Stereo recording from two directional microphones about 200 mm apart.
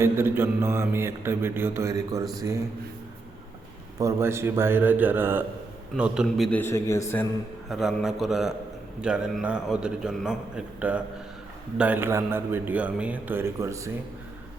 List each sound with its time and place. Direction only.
0.0 s speech: 10° right (ahead or behind)
3.9 s a man's voice: 15° right (ahead or behind); by 7.3 s 15° left (ahead or behind)
7.7 s a man's voice: centre (ahead or behind)